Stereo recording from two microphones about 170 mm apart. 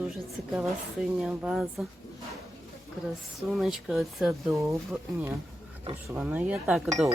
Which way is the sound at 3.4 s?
Centre (ahead or behind).